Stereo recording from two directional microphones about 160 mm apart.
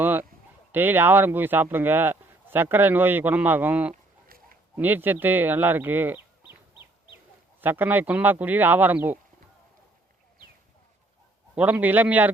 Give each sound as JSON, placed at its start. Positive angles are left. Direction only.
{"t": 0.0, "sound": "a sound", "side_deg": -10}
{"t": 0.7, "sound": "speech", "side_deg": -10}
{"t": 6.5, "sound": "fowl", "side_deg": 30}
{"t": 7.6, "sound": "speech", "side_deg": -10}
{"t": 11.5, "sound": "speech", "side_deg": -10}